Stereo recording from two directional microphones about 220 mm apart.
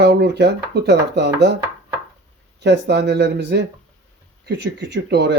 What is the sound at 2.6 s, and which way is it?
Speech, 50° right (ahead or behind).